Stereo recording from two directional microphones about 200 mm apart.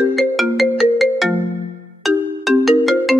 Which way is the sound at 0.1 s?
Centre (ahead or behind).